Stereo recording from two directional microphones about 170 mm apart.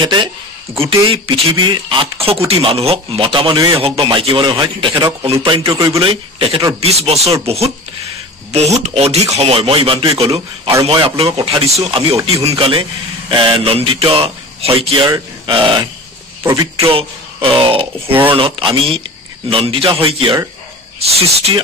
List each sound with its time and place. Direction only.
0.0 s speech: 25° right (ahead or behind)